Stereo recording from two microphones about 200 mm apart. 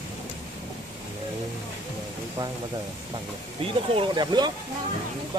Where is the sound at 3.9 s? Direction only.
20° right (ahead or behind).